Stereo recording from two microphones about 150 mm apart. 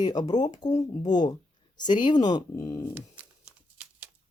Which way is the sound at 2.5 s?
15° left (ahead or behind).